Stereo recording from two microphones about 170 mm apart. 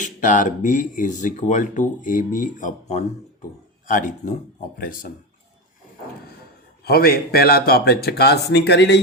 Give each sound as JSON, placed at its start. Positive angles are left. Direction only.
{"t": 0.0, "sound": "speech", "side_deg": 50}
{"t": 6.8, "sound": "speech", "side_deg": 65}